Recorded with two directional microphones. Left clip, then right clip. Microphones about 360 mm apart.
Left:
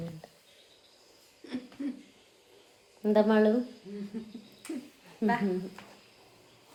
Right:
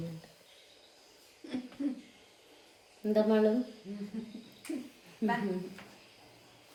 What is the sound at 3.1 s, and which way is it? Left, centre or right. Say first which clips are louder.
Speech: left 3 dB; left.